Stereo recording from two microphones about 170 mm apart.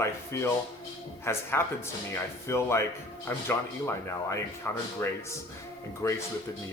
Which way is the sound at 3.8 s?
15° left (ahead or behind).